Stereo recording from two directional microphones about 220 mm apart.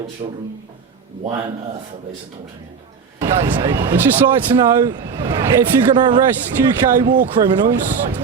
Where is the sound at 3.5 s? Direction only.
20° right (ahead or behind).